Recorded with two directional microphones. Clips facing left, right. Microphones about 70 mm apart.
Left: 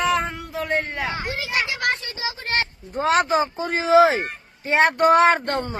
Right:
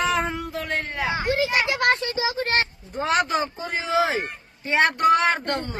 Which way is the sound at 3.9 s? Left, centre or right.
Left.